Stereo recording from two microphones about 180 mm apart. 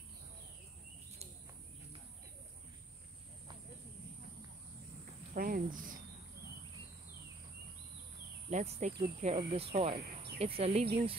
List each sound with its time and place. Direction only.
5.3 s speech: 50° right (ahead or behind)
8.5 s speech: 40° right (ahead or behind)